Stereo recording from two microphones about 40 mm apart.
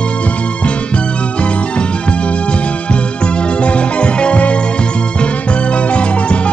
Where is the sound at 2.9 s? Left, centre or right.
Left.